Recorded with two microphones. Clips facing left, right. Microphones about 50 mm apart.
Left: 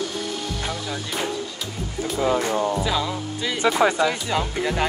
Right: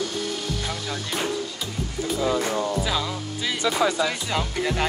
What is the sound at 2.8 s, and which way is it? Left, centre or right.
Speech, centre.